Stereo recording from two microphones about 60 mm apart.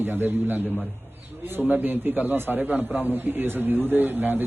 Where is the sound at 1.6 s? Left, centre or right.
Right.